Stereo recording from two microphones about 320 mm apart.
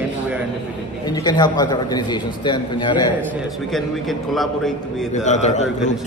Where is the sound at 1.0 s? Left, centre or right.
Centre.